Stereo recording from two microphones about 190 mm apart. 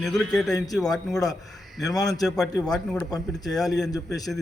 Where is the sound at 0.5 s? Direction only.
20° left (ahead or behind).